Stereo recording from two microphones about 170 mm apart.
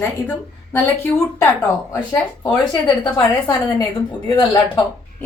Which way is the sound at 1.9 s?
25° left (ahead or behind).